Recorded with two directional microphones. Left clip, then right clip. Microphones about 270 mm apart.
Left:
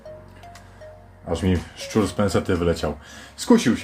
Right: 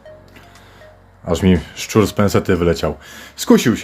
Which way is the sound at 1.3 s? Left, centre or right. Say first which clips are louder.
Right 8 dB; right.